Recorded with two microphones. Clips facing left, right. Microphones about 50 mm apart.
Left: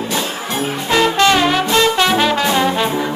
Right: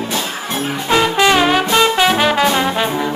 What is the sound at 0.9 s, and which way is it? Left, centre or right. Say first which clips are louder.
Music: even; centre.